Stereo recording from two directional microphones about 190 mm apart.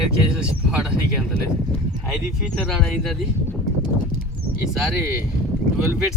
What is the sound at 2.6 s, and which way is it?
Speech, centre (ahead or behind).